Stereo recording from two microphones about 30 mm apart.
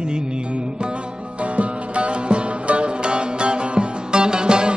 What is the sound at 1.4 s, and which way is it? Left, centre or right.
Music, right.